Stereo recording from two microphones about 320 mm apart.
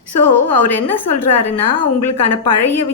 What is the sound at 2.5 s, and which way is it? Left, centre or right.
Speech, left.